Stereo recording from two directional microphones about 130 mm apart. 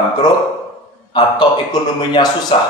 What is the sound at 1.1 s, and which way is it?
A man's voice, 35° left (ahead or behind).